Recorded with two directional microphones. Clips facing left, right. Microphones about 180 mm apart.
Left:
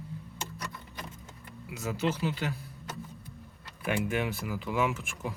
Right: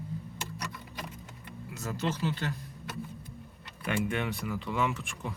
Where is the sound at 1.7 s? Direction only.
15° left (ahead or behind).